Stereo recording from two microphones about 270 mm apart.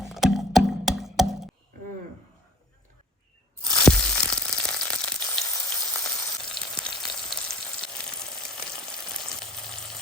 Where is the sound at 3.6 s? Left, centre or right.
Centre.